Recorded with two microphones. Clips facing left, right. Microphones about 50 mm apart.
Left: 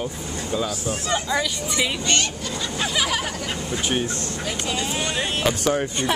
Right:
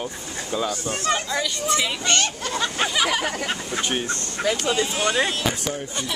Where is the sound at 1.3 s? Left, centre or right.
Centre.